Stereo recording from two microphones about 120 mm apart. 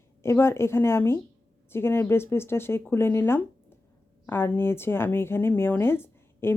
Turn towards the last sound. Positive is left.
turn(degrees=20)  # may be behind; listen again after turning